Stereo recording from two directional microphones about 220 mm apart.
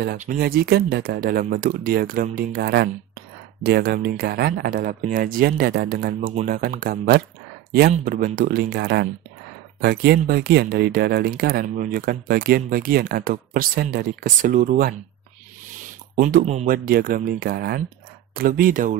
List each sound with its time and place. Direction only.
0.0 s speech: 40° right (ahead or behind)
16.2 s speech: 40° right (ahead or behind)